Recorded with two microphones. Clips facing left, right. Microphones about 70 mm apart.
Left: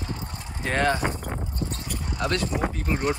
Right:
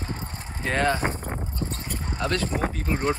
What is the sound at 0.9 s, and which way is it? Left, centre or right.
Speech, right.